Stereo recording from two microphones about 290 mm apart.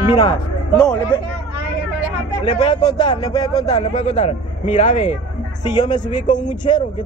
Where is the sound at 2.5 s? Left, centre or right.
Centre.